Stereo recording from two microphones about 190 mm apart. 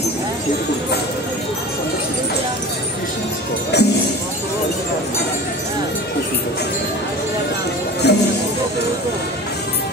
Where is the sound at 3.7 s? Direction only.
60° left (ahead or behind).